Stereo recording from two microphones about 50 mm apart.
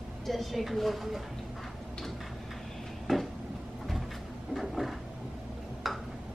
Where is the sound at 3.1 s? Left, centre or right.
Centre.